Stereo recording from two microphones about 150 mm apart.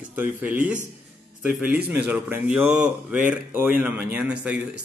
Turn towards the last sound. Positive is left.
turn(degrees=-10)  # may be behind; listen again after turning